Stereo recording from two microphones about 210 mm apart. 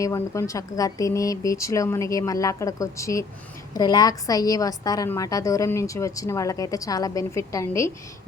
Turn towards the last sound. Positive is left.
turn(degrees=15)  # may be behind; listen again after turning